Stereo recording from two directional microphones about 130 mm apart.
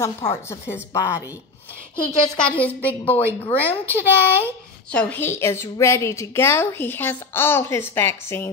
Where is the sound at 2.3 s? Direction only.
10° left (ahead or behind).